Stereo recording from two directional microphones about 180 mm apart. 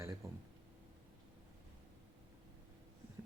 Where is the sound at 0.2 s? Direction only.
20° right (ahead or behind).